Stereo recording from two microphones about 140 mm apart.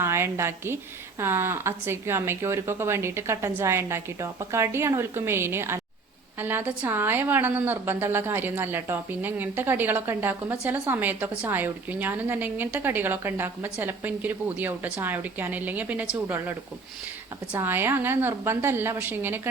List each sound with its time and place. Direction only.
0.0 s a woman's voice: 20° right (ahead or behind)